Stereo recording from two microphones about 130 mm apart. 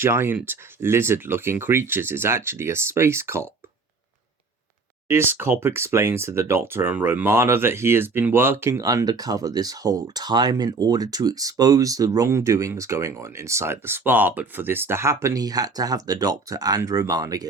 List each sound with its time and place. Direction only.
0.0 s speech: 20° right (ahead or behind)
5.0 s speech: 15° right (ahead or behind)